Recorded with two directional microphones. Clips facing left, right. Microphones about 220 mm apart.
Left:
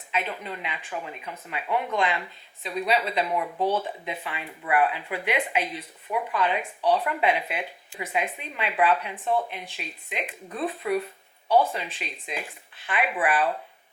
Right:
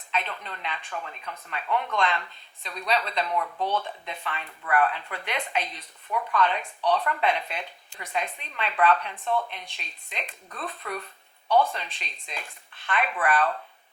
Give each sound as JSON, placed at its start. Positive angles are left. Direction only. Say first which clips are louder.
{"t": 0.1, "sound": "speech", "louder": "left 2 dB", "side_deg": 10}